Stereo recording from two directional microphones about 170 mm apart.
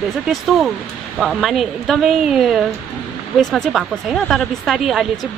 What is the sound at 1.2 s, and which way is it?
Speech, centre (ahead or behind).